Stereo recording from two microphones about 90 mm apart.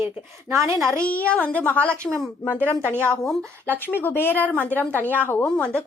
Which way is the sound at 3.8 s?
25° left (ahead or behind).